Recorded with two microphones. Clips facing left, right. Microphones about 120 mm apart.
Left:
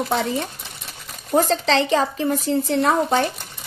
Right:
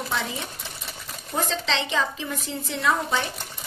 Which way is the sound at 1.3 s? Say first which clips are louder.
Left 9 dB; 40° left (ahead or behind).